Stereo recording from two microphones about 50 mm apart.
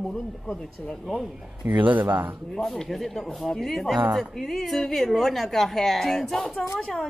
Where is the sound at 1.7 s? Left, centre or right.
Right.